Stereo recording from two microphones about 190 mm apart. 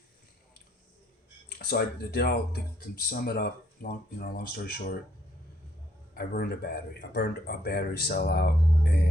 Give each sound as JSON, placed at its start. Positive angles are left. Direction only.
{"t": 1.5, "sound": "speech", "side_deg": 55}
{"t": 6.1, "sound": "speech", "side_deg": 55}